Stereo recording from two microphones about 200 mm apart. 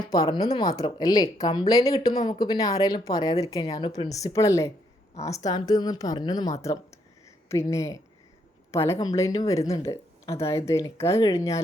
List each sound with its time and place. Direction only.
0.0 s a woman's voice: 20° left (ahead or behind)